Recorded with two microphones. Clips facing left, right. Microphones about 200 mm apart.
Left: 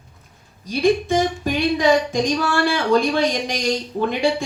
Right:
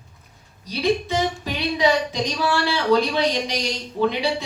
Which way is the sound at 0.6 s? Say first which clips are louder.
Left 4 dB; 50° left (ahead or behind).